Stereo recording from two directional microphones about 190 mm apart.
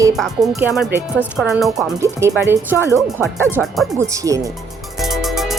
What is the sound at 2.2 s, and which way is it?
Music, 15° right (ahead or behind).